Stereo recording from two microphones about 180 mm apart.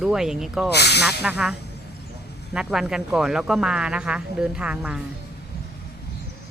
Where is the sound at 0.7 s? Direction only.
65° left (ahead or behind).